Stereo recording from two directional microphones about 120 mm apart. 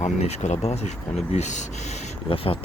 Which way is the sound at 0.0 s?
70° left (ahead or behind).